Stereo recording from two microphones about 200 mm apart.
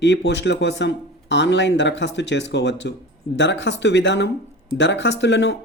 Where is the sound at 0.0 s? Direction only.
60° left (ahead or behind).